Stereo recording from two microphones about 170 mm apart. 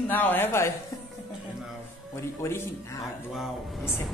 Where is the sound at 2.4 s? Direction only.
15° left (ahead or behind).